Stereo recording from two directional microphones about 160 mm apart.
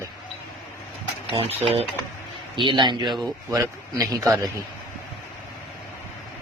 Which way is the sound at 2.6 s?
30° right (ahead or behind).